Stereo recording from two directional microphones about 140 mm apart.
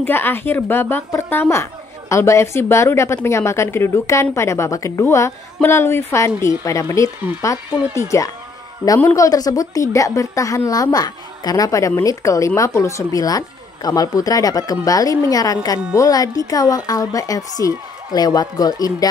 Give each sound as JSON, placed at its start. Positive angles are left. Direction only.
{"t": 0.0, "sound": "a woman's voice", "side_deg": 15}
{"t": 8.1, "sound": "a woman's voice", "side_deg": 20}